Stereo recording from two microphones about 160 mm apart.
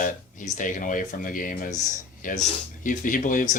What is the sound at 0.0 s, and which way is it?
Speech, 55° left (ahead or behind).